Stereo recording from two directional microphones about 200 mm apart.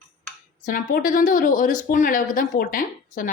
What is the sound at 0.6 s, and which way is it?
Speech, 45° left (ahead or behind).